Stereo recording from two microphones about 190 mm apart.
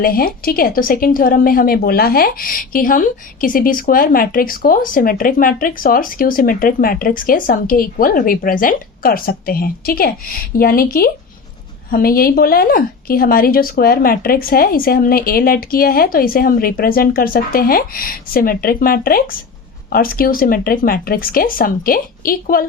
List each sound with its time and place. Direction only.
0.0 s a woman's voice: 50° left (ahead or behind)